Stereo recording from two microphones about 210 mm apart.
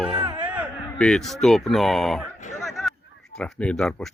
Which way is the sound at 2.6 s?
Centre (ahead or behind).